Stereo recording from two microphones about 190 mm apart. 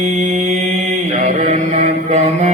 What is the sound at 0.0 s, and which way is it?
Mantra, 35° right (ahead or behind).